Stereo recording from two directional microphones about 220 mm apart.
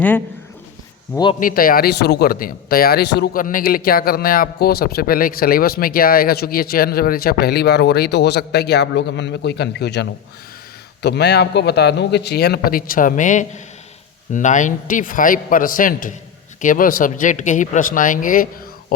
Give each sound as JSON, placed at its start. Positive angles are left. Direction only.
{"t": 1.1, "sound": "a man's voice", "side_deg": 20}
{"t": 1.4, "sound": "speech", "side_deg": 40}